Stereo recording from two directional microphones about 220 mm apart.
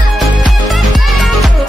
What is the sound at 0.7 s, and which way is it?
Music, centre (ahead or behind).